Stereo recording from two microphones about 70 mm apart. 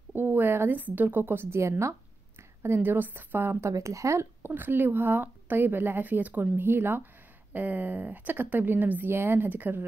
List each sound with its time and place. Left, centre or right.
0.1 s a woman's voice: right
2.6 s a woman's voice: right
3.7 s speech: right
4.5 s speech: right